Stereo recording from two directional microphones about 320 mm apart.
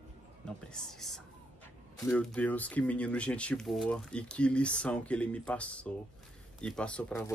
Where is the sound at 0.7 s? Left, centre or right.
Centre.